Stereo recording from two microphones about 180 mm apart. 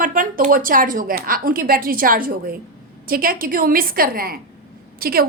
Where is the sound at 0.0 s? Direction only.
50° right (ahead or behind).